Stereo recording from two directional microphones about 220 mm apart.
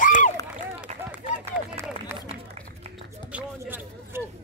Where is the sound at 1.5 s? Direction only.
10° right (ahead or behind).